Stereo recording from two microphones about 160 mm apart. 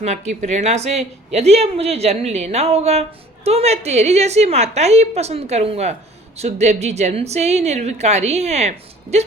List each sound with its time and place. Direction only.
0.0 s a woman's voice: 45° right (ahead or behind)